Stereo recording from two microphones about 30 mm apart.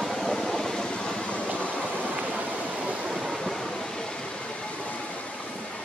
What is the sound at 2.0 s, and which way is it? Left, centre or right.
Waterfall, right.